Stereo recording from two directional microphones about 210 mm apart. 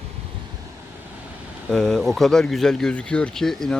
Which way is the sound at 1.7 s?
5° left (ahead or behind).